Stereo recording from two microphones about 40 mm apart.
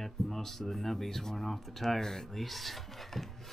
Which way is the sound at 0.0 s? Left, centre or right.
Centre.